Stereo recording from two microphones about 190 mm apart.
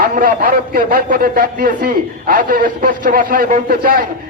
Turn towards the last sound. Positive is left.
turn(degrees=-50)  # may be behind; listen again after turning